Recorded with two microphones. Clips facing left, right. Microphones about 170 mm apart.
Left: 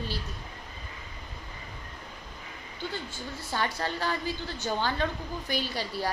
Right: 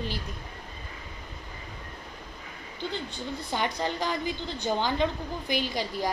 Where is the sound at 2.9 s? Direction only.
15° right (ahead or behind).